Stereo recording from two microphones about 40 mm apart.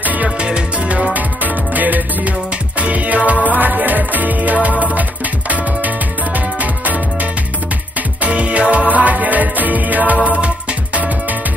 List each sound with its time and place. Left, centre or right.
0.0 s music: right
0.4 s music: right
1.1 s music: right
6.3 s music: right
8.2 s music: right